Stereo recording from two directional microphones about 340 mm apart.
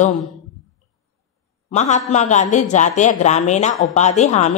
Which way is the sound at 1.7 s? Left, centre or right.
Left.